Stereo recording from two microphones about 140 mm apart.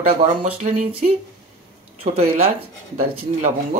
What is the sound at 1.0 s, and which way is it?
Speech, 55° right (ahead or behind).